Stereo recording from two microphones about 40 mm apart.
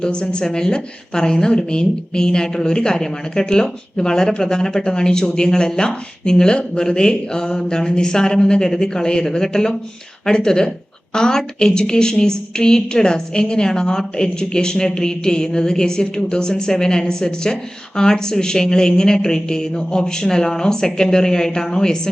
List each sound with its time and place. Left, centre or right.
0.0 s a woman's voice: left